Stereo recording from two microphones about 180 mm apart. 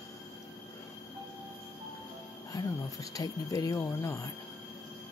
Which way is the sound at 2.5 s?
20° left (ahead or behind).